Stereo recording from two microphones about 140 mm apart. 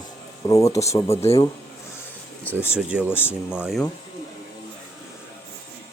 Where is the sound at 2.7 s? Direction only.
5° right (ahead or behind).